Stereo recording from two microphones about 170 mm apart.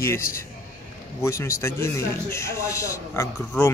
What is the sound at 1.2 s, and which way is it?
Speech, 15° left (ahead or behind).